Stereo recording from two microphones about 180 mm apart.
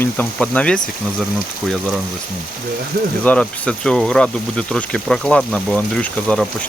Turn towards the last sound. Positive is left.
turn(degrees=5)  # may be behind; listen again after turning